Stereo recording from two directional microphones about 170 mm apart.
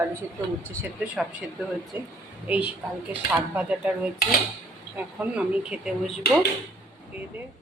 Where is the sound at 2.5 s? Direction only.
10° right (ahead or behind).